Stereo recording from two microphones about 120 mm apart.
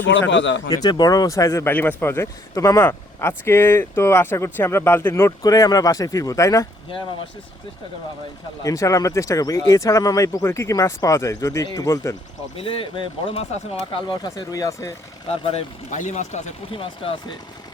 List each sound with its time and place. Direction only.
0.7 s speech: 35° left (ahead or behind)
8.6 s speech: 30° left (ahead or behind)
12.5 s speech: 50° left (ahead or behind)
14.1 s speech: 35° left (ahead or behind)
15.3 s speech: 60° left (ahead or behind); by 16.4 s 80° left
16.7 s speech: 50° left (ahead or behind)